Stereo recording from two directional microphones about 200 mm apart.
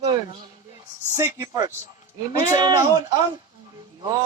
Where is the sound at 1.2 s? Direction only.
15° right (ahead or behind).